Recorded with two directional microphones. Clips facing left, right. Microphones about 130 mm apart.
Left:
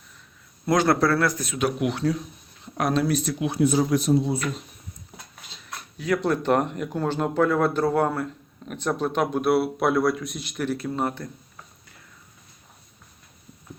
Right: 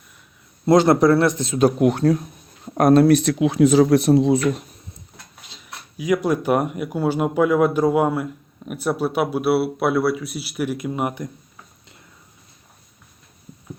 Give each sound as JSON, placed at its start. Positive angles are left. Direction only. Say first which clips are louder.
{"t": 0.6, "sound": "speech", "louder": "right 6 dB", "side_deg": -25}
{"t": 5.6, "sound": "speech", "louder": "right 4 dB", "side_deg": -10}